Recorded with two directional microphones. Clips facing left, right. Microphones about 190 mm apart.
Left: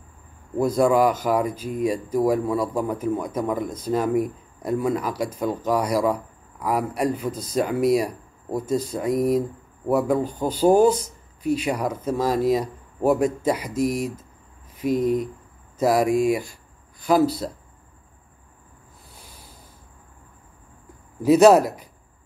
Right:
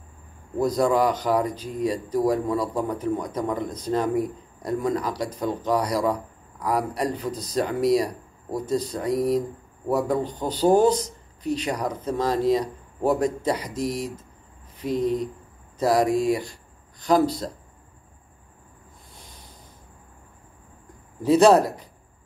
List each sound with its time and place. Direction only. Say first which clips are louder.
0.7 s a man's voice: left 3 dB; 10° left (ahead or behind)
21.2 s a man's voice: left 2 dB; 10° left (ahead or behind)